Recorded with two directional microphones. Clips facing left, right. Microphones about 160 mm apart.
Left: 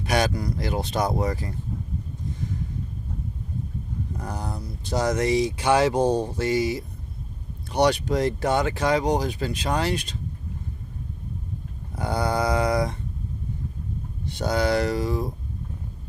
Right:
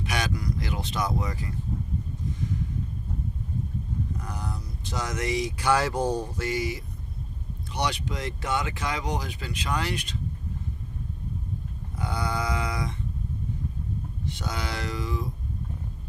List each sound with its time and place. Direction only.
0.0 s speech: 35° left (ahead or behind)
4.2 s speech: 35° left (ahead or behind)
7.7 s speech: 40° left (ahead or behind)
11.9 s a sound: 40° left (ahead or behind)
14.3 s speech: 35° left (ahead or behind)